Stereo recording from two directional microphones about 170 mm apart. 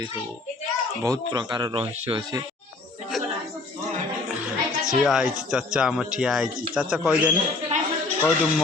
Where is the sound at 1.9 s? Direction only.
40° right (ahead or behind).